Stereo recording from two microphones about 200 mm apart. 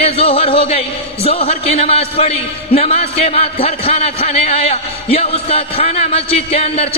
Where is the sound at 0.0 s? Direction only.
30° left (ahead or behind).